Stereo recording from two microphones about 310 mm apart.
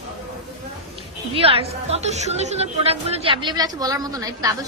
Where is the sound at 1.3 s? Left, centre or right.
Centre.